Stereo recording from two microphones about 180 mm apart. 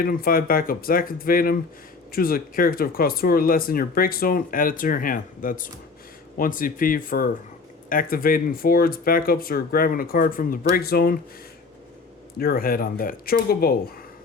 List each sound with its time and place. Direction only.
0.0 s speech: 55° left (ahead or behind)
12.4 s speech: 55° left (ahead or behind)